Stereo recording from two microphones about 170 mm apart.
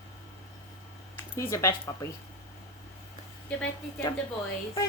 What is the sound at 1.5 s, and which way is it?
Speech, 15° left (ahead or behind).